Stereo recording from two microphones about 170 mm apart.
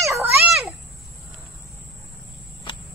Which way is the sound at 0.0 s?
15° right (ahead or behind).